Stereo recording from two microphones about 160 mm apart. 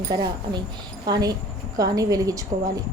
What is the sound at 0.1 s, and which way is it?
Speech, 25° right (ahead or behind).